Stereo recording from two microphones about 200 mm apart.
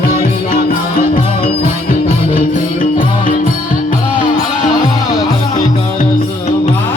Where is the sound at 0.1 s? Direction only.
40° left (ahead or behind).